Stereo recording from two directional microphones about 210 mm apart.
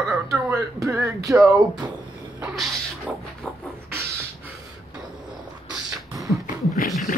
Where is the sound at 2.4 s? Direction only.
5° right (ahead or behind).